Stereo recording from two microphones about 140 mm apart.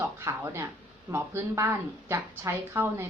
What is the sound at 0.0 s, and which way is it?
A woman's voice, 15° right (ahead or behind).